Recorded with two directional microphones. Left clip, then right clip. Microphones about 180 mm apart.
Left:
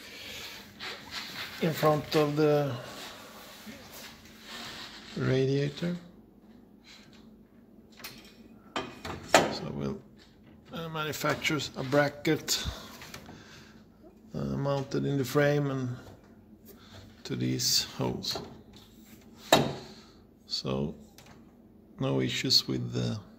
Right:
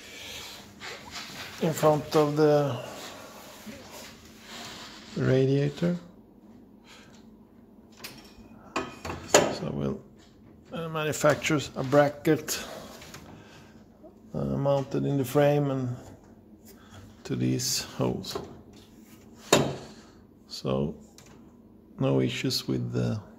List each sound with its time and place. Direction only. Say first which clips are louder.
0.1 s a sound: right 2 dB; centre (ahead or behind)
1.6 s speech: right 3 dB; 5° left (ahead or behind)
5.2 s speech: right 4 dB; 15° right (ahead or behind)
9.5 s a sound: right 4 dB; 20° right (ahead or behind)
11.1 s speech: right 6 dB; 25° right (ahead or behind)
14.3 s speech: right 5 dB; 10° right (ahead or behind)
17.2 s speech: right 2 dB; 20° right (ahead or behind)
19.7 s a sound: right 2 dB; 25° right (ahead or behind)
20.5 s speech: right 3 dB; 15° right (ahead or behind)
21.9 s speech: right 3 dB; 15° right (ahead or behind)